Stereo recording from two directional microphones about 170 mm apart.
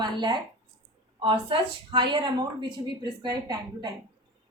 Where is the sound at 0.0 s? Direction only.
25° right (ahead or behind).